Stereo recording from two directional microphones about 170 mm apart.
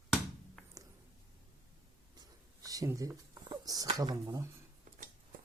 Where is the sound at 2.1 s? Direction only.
20° right (ahead or behind).